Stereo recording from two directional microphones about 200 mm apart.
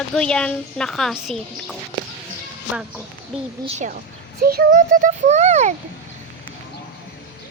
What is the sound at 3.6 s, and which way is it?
Speech, 35° right (ahead or behind).